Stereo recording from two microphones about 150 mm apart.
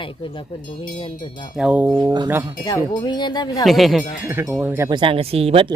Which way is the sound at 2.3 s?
15° right (ahead or behind).